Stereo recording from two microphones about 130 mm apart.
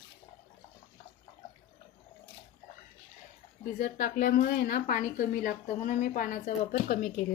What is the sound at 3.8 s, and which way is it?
A woman's voice, 90° left.